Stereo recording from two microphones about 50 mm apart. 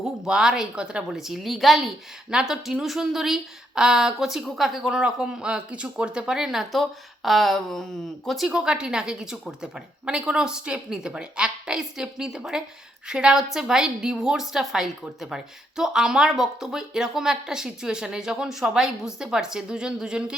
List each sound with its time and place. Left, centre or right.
0.0 s speech: centre
1.1 s a woman's voice: centre
2.3 s a woman's voice: centre
8.4 s a woman's voice: centre